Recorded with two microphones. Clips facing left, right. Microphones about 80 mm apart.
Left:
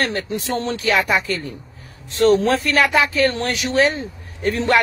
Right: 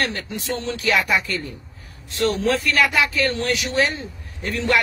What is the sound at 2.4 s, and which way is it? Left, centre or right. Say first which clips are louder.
Speech: left 2 dB; left.